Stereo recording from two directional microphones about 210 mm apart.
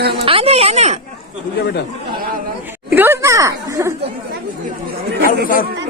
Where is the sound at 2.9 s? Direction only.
10° right (ahead or behind).